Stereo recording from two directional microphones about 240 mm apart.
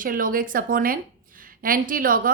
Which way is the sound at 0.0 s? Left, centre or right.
Right.